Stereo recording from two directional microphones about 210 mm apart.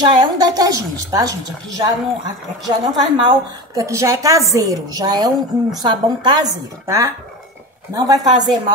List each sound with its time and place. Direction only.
0.0 s a woman's voice: 20° right (ahead or behind)